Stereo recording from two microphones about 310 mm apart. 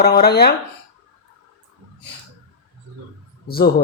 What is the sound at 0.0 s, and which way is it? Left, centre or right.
Speech, left.